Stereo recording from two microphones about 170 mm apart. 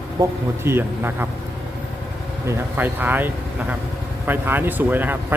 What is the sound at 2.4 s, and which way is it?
Speech, 10° right (ahead or behind).